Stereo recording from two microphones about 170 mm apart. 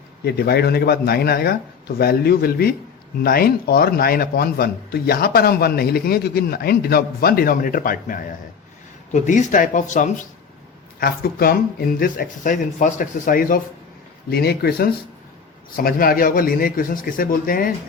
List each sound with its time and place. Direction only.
0.3 s a man's voice: 70° left (ahead or behind); by 10.1 s 50° left (ahead or behind)
11.0 s a man's voice: 65° left (ahead or behind)
14.3 s a man's voice: 70° left (ahead or behind)